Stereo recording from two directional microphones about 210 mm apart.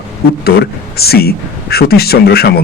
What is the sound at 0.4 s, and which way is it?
Speech, 50° left (ahead or behind).